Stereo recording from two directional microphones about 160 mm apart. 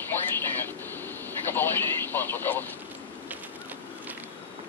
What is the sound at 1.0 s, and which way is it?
Speech, 15° left (ahead or behind).